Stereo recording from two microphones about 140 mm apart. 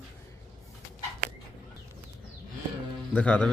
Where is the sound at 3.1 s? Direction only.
10° left (ahead or behind).